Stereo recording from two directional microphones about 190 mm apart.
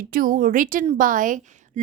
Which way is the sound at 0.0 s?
50° right (ahead or behind).